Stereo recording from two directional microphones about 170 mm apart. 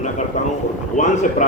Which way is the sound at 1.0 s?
45° left (ahead or behind).